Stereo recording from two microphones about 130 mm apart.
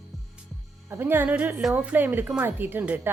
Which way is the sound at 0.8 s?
15° right (ahead or behind).